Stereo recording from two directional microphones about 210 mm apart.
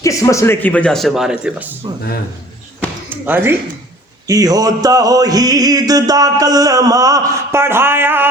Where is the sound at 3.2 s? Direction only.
10° right (ahead or behind).